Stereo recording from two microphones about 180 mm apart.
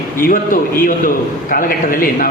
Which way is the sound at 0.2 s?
50° left (ahead or behind).